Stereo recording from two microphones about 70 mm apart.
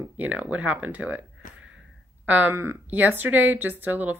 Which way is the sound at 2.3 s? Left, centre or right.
Right.